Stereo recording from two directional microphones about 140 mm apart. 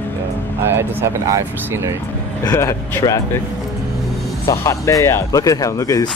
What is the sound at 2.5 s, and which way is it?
Speech, 20° left (ahead or behind).